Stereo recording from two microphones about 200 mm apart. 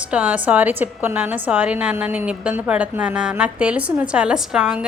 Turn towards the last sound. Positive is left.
turn(degrees=-5)  # may be behind; listen again after turning